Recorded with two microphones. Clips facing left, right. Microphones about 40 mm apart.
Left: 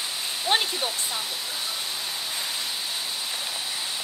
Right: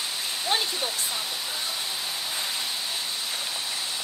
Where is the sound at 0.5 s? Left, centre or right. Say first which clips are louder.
Left 3 dB; left.